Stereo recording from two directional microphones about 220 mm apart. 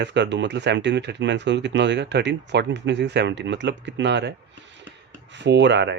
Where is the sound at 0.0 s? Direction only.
50° right (ahead or behind).